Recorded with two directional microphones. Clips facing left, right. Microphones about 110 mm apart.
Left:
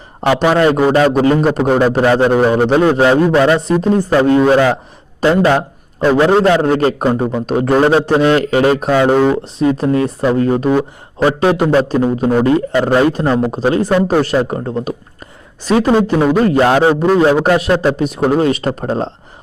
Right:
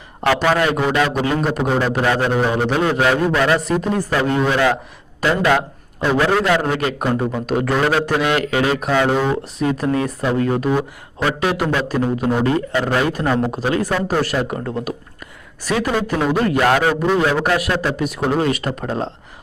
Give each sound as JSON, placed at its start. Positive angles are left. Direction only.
{"t": 0.3, "sound": "a man's voice", "side_deg": 25}